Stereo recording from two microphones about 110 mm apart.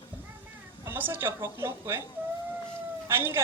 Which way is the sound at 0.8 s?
20° right (ahead or behind).